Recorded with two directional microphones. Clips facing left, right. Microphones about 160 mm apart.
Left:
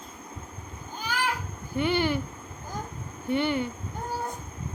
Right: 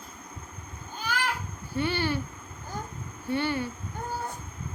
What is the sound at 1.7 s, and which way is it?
Speech, 15° left (ahead or behind).